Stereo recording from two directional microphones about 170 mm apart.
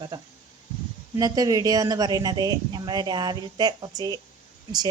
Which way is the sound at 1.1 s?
20° right (ahead or behind).